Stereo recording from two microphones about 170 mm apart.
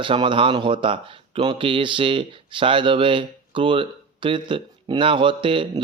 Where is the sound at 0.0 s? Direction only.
30° right (ahead or behind).